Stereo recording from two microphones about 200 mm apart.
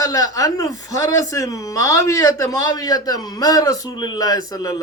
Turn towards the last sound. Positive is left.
turn(degrees=15)  # may be behind; listen again after turning